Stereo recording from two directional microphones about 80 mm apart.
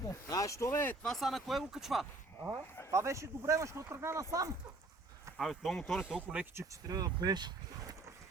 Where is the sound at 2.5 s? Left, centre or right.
Right.